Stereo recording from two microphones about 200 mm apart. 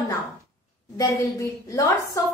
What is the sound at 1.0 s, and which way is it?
A woman's voice, 15° left (ahead or behind).